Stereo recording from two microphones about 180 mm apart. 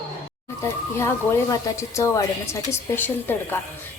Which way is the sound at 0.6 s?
15° left (ahead or behind).